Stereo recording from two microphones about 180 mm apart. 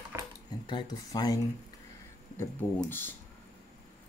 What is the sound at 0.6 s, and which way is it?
Speech, 25° left (ahead or behind).